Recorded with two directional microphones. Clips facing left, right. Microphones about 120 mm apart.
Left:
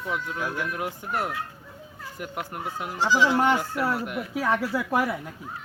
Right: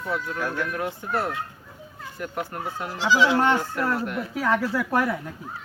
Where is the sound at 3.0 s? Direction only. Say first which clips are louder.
Right 1 dB; 80° right.